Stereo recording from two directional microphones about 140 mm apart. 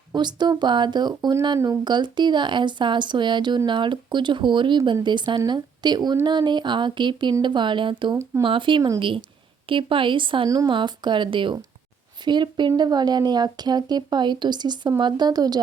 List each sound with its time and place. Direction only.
0.1 s speech: 30° right (ahead or behind)
8.1 s speech: 25° right (ahead or behind)
8.4 s speech: 35° right (ahead or behind)